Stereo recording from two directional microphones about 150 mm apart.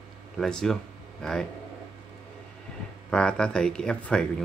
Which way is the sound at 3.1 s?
5° left (ahead or behind).